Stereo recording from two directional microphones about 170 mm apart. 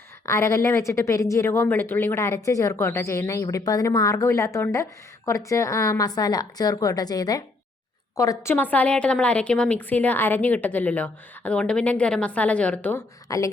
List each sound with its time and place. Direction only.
0.3 s a woman's voice: 15° left (ahead or behind)
13.2 s speech: 20° left (ahead or behind)